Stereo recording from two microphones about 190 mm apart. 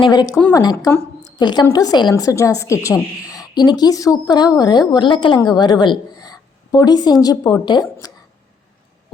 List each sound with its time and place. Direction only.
0.0 s a woman's voice: 20° left (ahead or behind)